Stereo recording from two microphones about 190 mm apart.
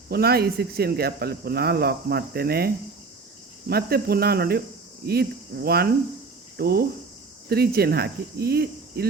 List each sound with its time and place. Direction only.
0.1 s speech: 55° right (ahead or behind)